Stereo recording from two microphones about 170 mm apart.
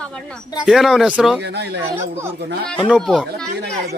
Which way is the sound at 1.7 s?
15° right (ahead or behind).